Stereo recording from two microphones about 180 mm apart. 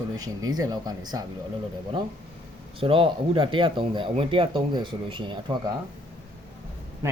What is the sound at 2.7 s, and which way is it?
Speech, 30° right (ahead or behind).